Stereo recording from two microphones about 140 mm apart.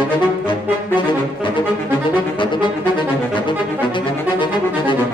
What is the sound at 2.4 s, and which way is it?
Music, 35° left (ahead or behind).